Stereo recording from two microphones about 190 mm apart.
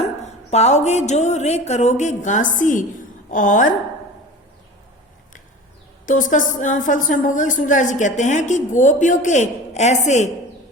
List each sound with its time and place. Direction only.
0.3 s a woman's voice: 35° left (ahead or behind)
6.1 s a woman's voice: 45° left (ahead or behind)